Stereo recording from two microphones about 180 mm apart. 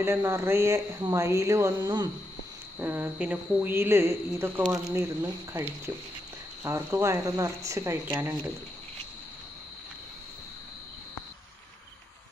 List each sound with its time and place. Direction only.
0.0 s speech: 15° right (ahead or behind)
2.8 s speech: 10° right (ahead or behind)